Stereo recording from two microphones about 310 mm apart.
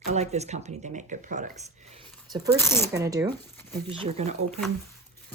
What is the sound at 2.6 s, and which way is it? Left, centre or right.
Speech, centre.